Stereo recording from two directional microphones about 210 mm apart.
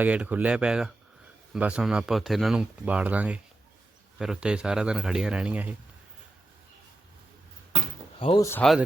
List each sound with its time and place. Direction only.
0.0 s speech: 5° right (ahead or behind)
8.2 s speech: 25° left (ahead or behind)
8.4 s speech: 10° left (ahead or behind)